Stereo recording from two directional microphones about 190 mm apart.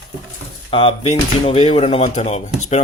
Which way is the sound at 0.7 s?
30° left (ahead or behind).